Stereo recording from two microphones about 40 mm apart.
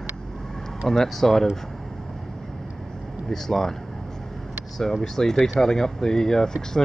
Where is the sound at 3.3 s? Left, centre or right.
Centre.